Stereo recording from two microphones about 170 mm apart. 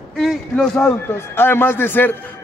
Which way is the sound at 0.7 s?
15° left (ahead or behind).